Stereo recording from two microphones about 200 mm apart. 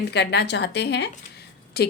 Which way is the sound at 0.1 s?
55° left (ahead or behind).